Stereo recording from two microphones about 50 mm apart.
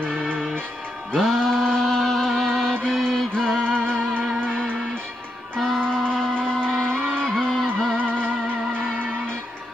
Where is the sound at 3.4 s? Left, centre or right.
Centre.